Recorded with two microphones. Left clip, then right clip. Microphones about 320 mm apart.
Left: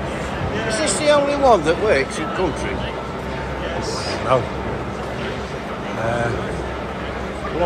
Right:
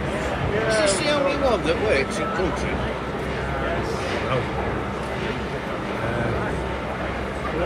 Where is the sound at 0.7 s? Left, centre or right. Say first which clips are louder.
Left 4 dB; left.